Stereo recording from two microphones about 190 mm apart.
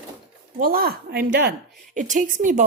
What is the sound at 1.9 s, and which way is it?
Speech, 40° right (ahead or behind).